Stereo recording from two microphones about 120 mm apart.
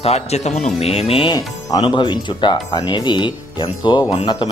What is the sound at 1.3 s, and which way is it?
Speech, 35° left (ahead or behind).